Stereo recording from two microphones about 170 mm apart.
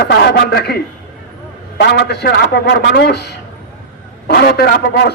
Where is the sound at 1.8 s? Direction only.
75° left (ahead or behind).